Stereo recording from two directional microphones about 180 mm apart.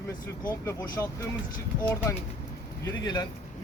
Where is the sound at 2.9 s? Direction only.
25° left (ahead or behind).